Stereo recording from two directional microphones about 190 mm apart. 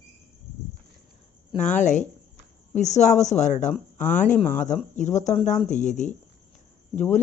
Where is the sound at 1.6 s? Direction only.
40° left (ahead or behind).